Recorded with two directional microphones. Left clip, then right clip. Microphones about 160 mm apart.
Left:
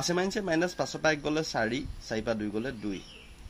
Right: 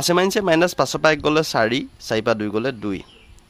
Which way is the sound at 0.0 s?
70° right (ahead or behind).